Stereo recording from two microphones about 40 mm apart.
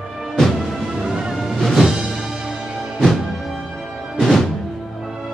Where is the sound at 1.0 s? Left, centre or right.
Centre.